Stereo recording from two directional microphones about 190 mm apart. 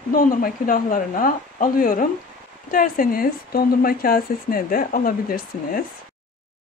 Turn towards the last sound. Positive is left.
turn(degrees=50)  # may be behind; listen again after turning